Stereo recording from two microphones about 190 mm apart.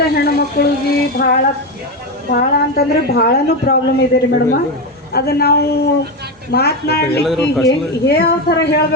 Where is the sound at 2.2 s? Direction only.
55° left (ahead or behind).